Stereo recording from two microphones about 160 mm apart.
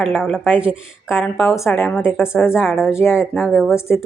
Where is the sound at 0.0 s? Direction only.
5° right (ahead or behind).